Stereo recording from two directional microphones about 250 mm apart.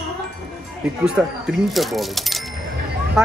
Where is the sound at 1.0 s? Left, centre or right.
Centre.